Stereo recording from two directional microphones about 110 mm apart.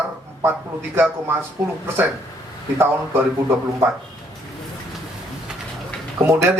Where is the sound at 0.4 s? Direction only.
20° right (ahead or behind).